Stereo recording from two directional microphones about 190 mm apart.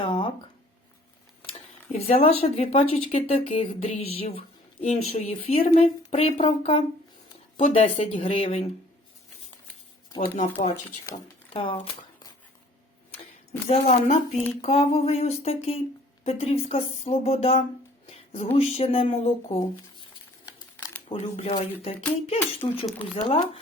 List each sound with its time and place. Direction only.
0.0 s a sound: 25° left (ahead or behind)
1.9 s speech: 30° left (ahead or behind)
10.2 s speech: 40° left (ahead or behind)
11.5 s speech: 30° left (ahead or behind)
13.7 s speech: 35° left (ahead or behind)
18.1 s music: 35° left (ahead or behind)
18.5 s speech: 30° left (ahead or behind)
20.0 s crumpling: 20° left (ahead or behind)
21.1 s speech: 35° left (ahead or behind)